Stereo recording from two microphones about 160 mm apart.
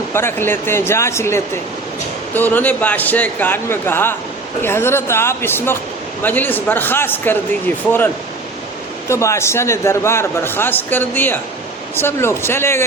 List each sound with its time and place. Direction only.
0.1 s a man's voice: 15° left (ahead or behind)
9.0 s a man's voice: 20° left (ahead or behind)